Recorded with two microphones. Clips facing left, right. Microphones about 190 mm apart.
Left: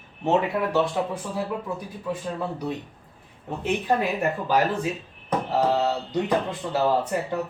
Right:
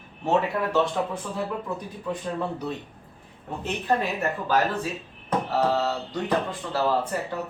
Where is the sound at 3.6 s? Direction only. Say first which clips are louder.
Left 2 dB; 10° left (ahead or behind).